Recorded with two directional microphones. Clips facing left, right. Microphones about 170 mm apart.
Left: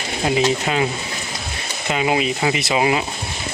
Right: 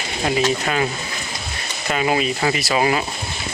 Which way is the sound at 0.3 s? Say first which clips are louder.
Left 1 dB; 20° left (ahead or behind).